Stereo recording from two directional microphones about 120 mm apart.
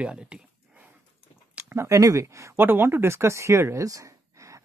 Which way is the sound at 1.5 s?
20° right (ahead or behind).